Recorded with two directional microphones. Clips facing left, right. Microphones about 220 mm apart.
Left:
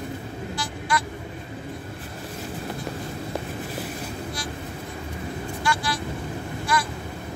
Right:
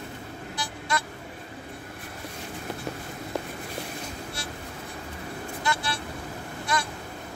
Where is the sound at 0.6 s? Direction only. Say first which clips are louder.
Left 3 dB; 25° right (ahead or behind).